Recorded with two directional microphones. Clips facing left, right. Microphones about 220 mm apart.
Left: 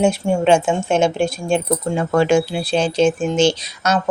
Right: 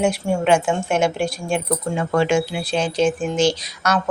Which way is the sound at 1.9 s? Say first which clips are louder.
Left 3 dB; 35° left (ahead or behind).